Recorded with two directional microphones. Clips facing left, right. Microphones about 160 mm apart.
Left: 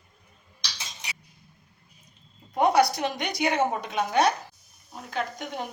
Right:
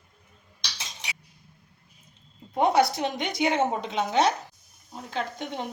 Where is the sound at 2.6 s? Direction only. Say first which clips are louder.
Left 1 dB; 25° right (ahead or behind).